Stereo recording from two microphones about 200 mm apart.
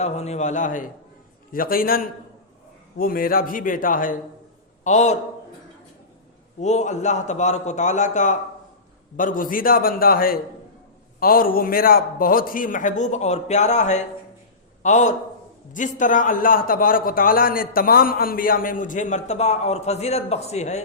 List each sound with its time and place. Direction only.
0.0 s a man's voice: 30° left (ahead or behind)
6.6 s a man's voice: 35° left (ahead or behind)